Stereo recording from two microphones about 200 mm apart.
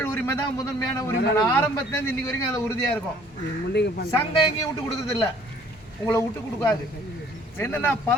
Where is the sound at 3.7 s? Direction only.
55° left (ahead or behind).